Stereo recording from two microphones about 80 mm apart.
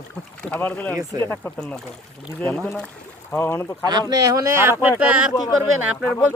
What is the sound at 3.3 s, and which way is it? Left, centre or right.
Speech, left.